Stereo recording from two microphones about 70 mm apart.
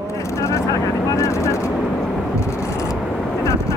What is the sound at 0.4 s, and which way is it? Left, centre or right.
Speech, left.